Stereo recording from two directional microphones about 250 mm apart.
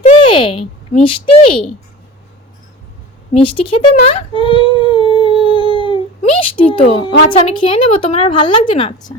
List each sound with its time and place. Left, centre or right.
0.0 s a child's voice: left
3.3 s speech: left
5.7 s a sound: left
6.4 s speech: left